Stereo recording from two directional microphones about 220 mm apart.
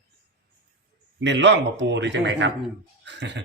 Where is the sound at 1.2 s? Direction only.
55° right (ahead or behind).